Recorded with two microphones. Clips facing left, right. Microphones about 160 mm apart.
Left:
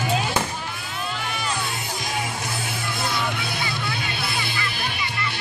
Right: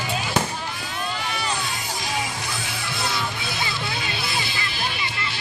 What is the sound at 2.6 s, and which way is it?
Music, 50° left (ahead or behind).